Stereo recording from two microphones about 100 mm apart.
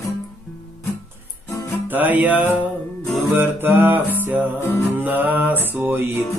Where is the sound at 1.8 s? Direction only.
20° right (ahead or behind).